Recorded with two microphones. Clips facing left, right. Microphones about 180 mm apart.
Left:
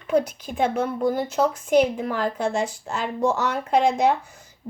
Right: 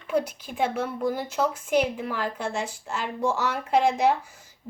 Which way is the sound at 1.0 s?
40° left (ahead or behind).